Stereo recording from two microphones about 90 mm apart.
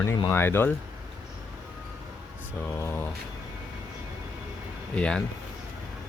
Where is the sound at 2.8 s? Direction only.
25° left (ahead or behind).